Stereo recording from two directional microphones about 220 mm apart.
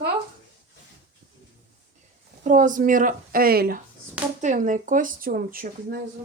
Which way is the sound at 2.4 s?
35° right (ahead or behind).